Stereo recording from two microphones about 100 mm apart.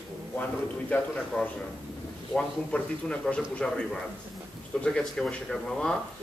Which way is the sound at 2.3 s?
10° left (ahead or behind).